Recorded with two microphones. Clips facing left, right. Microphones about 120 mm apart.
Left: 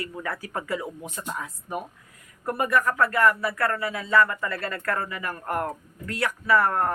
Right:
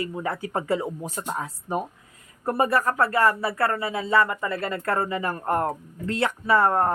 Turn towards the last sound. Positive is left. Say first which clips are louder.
# right 2 dB
turn(degrees=-25)  # may be behind; listen again after turning